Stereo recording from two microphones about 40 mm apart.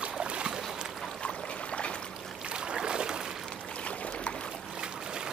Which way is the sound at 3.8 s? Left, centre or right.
Left.